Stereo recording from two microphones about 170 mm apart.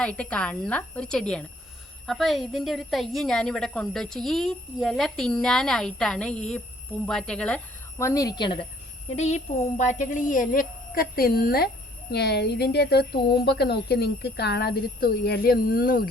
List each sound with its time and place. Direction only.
0.0 s a woman's voice: 5° left (ahead or behind)
7.9 s speech: 20° left (ahead or behind)
9.1 s speech: 40° left (ahead or behind); by 16.0 s 60° left (ahead or behind)